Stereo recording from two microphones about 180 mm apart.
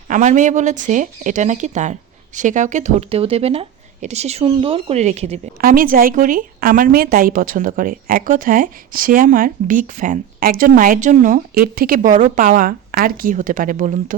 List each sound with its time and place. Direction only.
0.1 s speech: 45° right (ahead or behind)
5.5 s a woman's voice: 55° right (ahead or behind)